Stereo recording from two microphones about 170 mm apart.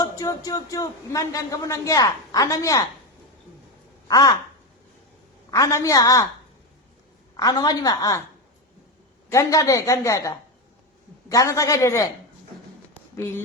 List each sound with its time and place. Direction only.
0.0 s a man's voice: 20° left (ahead or behind)
4.1 s a man's voice: 20° left (ahead or behind)
5.5 s a man's voice: 20° left (ahead or behind)
7.3 s a man's voice: 20° left (ahead or behind)
9.3 s a man's voice: 20° left (ahead or behind)
12.9 s a sound: 15° left (ahead or behind)